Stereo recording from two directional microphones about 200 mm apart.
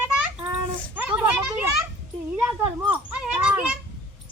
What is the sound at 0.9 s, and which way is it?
Children playing, 10° right (ahead or behind).